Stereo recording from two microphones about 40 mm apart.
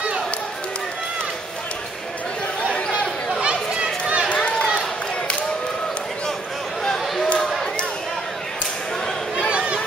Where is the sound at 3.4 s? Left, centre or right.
Right.